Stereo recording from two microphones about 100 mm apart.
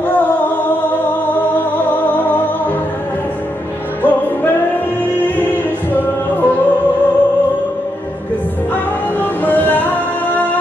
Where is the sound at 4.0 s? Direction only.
20° left (ahead or behind).